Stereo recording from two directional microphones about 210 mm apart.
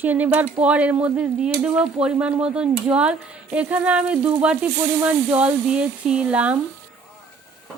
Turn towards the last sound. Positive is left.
turn(degrees=-5)  # may be behind; listen again after turning